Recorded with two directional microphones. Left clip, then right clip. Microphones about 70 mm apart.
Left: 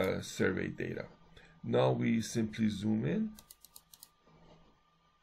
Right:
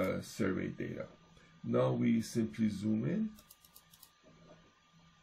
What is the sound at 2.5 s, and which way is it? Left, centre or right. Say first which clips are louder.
Speech: left 1 dB; left.